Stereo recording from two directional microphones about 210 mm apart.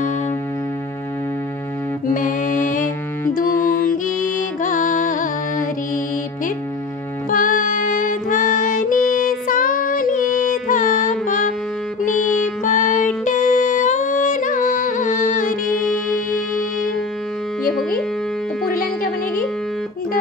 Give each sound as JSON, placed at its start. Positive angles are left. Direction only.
{"t": 2.1, "sound": "music", "side_deg": 40}
{"t": 7.2, "sound": "music", "side_deg": 40}
{"t": 12.6, "sound": "music", "side_deg": 35}
{"t": 15.6, "sound": "music", "side_deg": 5}